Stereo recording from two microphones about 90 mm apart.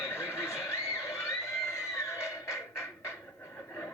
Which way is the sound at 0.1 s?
30° left (ahead or behind).